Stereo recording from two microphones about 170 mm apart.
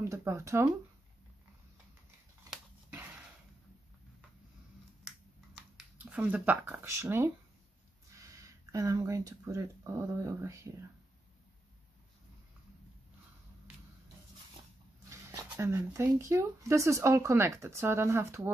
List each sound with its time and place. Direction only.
0.0 s speech: 15° right (ahead or behind)
5.6 s speech: 10° right (ahead or behind)
15.0 s speech: 15° right (ahead or behind)